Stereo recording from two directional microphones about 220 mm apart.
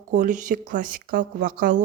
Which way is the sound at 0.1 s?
35° right (ahead or behind).